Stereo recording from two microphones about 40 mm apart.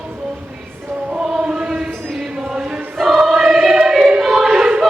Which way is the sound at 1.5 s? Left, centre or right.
Centre.